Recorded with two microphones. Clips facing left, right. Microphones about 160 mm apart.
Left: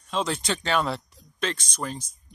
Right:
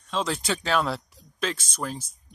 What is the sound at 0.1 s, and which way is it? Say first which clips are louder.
Speech: even; centre (ahead or behind).